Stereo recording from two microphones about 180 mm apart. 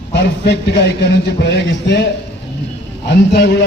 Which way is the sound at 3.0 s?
65° left (ahead or behind).